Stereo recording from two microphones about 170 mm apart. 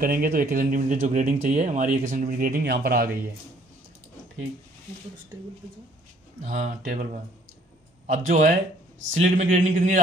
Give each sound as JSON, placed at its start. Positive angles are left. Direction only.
{"t": 0.0, "sound": "speech", "side_deg": -60}
{"t": 6.4, "sound": "speech", "side_deg": -50}